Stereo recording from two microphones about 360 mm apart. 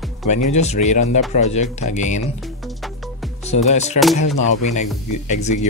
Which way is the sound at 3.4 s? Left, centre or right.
Centre.